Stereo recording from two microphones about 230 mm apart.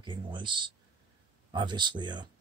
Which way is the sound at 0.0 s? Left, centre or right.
Right.